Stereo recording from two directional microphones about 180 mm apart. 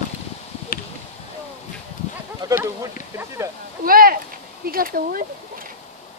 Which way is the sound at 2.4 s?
15° right (ahead or behind).